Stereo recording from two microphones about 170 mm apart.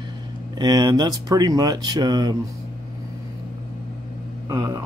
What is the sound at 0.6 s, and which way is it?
Speech, 25° right (ahead or behind).